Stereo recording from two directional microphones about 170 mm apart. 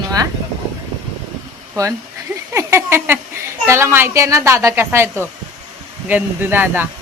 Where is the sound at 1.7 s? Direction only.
20° right (ahead or behind).